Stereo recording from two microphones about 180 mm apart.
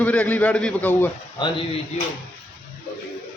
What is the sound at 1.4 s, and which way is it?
Speech, 20° left (ahead or behind).